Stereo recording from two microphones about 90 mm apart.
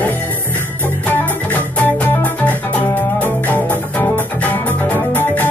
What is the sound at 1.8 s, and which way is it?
Music, 15° left (ahead or behind).